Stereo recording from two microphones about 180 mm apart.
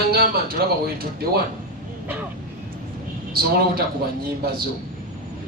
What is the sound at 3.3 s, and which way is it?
Speech, 60° right (ahead or behind).